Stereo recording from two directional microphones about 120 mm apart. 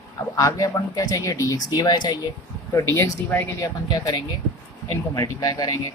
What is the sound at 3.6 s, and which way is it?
Speech, 35° left (ahead or behind).